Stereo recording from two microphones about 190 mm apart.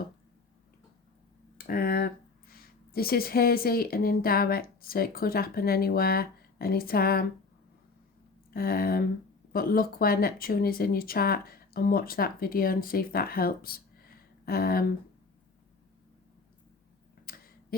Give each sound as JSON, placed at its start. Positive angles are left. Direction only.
{"t": 1.5, "sound": "speech", "side_deg": 50}
{"t": 8.4, "sound": "speech", "side_deg": 50}
{"t": 17.2, "sound": "tick", "side_deg": 50}